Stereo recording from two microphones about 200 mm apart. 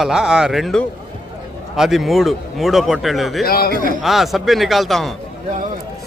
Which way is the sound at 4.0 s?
Centre (ahead or behind).